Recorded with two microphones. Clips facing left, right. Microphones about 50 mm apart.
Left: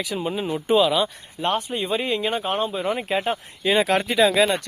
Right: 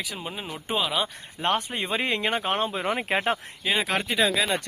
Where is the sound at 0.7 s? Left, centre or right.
Centre.